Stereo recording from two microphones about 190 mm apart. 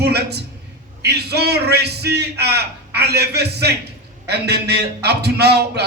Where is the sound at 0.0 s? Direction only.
60° right (ahead or behind).